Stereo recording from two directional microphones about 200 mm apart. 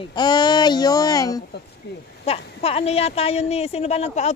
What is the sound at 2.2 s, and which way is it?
A woman's voice, 30° left (ahead or behind).